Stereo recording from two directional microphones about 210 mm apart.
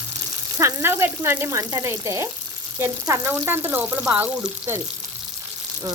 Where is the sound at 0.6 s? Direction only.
15° right (ahead or behind).